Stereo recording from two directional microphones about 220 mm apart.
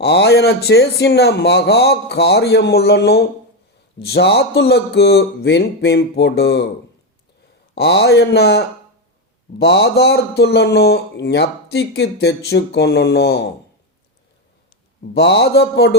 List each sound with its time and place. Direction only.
0.0 s speech: 50° left (ahead or behind)
7.8 s speech: 50° left (ahead or behind)
15.1 s speech: 50° left (ahead or behind)